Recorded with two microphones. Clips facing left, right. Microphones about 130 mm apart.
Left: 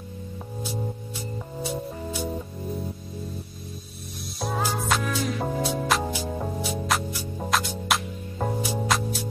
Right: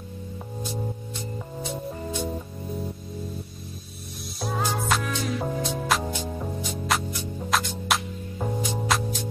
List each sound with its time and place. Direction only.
1.6 s music: 5° left (ahead or behind)
4.4 s music: 5° left (ahead or behind)